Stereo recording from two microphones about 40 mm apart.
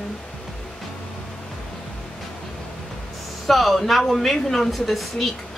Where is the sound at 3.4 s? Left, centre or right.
Centre.